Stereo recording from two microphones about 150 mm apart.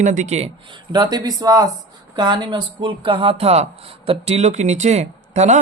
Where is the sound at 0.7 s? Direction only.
30° right (ahead or behind); by 5.6 s 50° right (ahead or behind).